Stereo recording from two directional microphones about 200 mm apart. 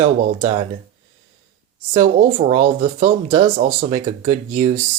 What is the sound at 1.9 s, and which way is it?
Speech, 30° right (ahead or behind).